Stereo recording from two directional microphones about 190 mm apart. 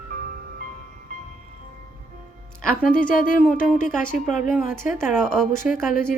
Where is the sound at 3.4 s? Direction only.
5° left (ahead or behind).